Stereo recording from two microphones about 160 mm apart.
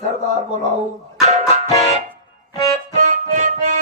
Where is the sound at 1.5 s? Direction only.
45° right (ahead or behind).